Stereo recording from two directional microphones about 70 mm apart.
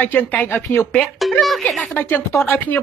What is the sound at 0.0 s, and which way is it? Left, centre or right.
Speech, left.